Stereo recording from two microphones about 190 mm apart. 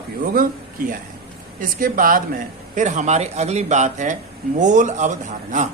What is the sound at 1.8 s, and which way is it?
Speech, 45° right (ahead or behind).